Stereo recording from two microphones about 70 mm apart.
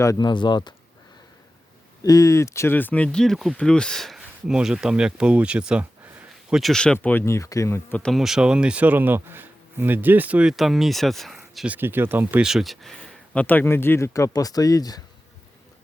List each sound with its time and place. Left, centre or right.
0.2 s speech: left
2.0 s speech: left
2.7 s speech: left; by 4.2 s centre
4.4 s speech: centre
6.5 s speech: centre
6.7 s speech: centre
7.3 s speech: left
8.1 s speech: centre
10.5 s speech: centre
11.8 s speech: right
12.4 s speech: centre
13.0 s speech: centre; by 15.0 s left